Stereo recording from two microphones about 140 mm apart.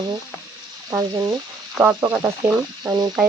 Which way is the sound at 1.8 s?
15° right (ahead or behind).